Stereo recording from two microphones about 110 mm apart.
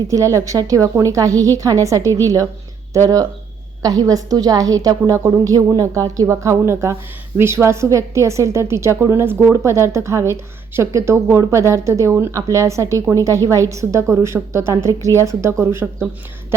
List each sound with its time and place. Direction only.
0.1 s a woman's voice: 30° right (ahead or behind)